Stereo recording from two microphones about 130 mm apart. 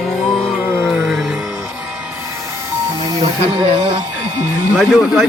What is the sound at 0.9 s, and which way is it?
Speech, centre (ahead or behind).